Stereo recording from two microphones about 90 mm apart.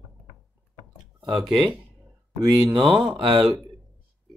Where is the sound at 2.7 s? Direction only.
65° right (ahead or behind).